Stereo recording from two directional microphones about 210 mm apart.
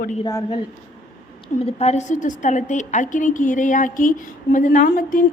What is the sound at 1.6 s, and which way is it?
A woman's voice, 30° left (ahead or behind).